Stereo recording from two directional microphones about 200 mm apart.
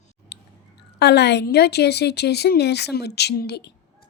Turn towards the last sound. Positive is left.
turn(degrees=55)  # may be behind; listen again after turning